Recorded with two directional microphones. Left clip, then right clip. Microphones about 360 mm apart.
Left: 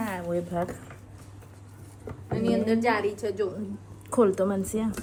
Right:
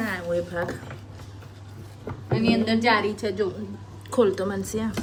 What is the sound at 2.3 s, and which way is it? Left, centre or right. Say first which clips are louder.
A woman's voice: right 2 dB; right.